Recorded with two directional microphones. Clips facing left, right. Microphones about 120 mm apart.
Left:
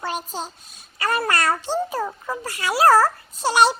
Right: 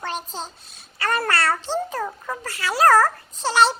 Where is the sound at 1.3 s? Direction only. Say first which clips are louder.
Left 1 dB; 15° left (ahead or behind).